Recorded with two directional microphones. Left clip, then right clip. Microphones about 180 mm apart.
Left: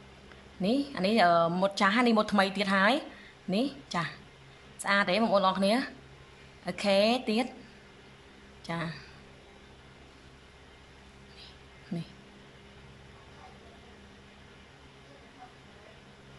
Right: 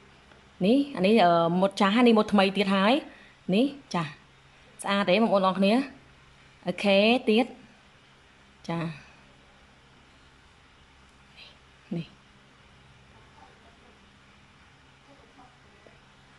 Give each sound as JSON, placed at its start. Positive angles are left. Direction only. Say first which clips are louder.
{"t": 0.6, "sound": "speech", "louder": "right 6 dB", "side_deg": -15}
{"t": 8.6, "sound": "speech", "louder": "right 2 dB", "side_deg": -15}
{"t": 11.3, "sound": "a sound", "louder": "right 2 dB", "side_deg": -15}